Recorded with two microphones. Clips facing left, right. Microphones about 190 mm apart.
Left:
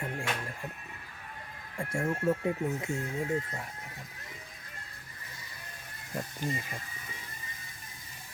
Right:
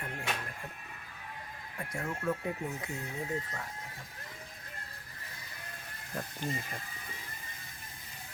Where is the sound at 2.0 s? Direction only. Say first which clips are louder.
Left 5 dB; 30° left (ahead or behind).